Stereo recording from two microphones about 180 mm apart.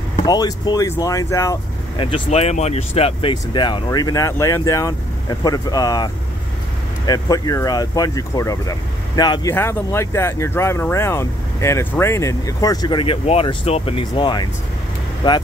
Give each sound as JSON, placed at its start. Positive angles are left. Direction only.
{"t": 0.2, "sound": "speech", "side_deg": 20}
{"t": 2.0, "sound": "speech", "side_deg": 30}
{"t": 7.1, "sound": "speech", "side_deg": 20}